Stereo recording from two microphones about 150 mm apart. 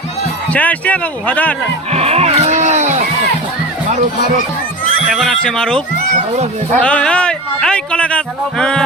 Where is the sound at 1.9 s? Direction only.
45° right (ahead or behind).